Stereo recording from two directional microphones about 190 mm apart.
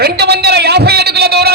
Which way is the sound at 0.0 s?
60° right (ahead or behind).